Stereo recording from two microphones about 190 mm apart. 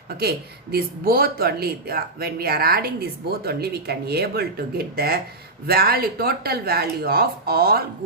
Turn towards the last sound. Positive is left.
turn(degrees=-55)  # may be behind; listen again after turning